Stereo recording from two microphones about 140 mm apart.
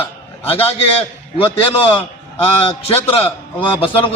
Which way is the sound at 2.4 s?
40° left (ahead or behind).